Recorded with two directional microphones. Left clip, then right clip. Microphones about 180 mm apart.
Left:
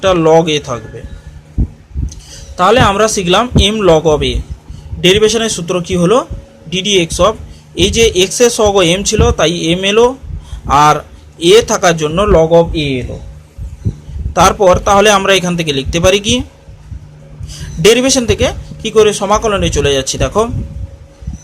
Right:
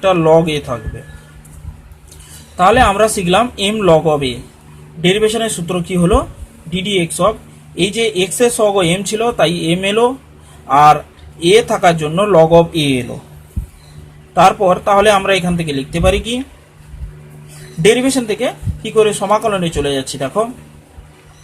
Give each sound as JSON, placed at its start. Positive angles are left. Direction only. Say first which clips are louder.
{"t": 0.0, "sound": "speech", "louder": "left 2 dB", "side_deg": 10}
{"t": 2.6, "sound": "a man's voice", "louder": "left 1 dB", "side_deg": 15}
{"t": 12.4, "sound": "speech", "louder": "right 3 dB", "side_deg": 0}
{"t": 14.7, "sound": "a man's voice", "louder": "left 3 dB", "side_deg": 20}
{"t": 17.8, "sound": "speech", "louder": "left 3 dB", "side_deg": 20}